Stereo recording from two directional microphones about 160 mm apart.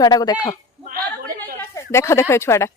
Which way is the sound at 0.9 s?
65° right (ahead or behind).